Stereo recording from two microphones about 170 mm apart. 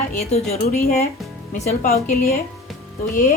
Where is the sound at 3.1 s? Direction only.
55° left (ahead or behind).